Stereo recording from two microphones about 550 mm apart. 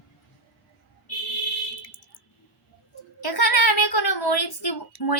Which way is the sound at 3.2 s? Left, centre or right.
Left.